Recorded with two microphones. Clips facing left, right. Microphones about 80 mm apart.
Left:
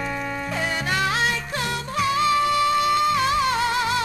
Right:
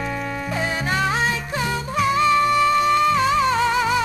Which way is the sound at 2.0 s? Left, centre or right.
Right.